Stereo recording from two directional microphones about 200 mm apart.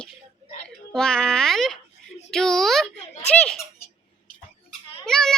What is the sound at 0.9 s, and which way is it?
Speech, 5° left (ahead or behind).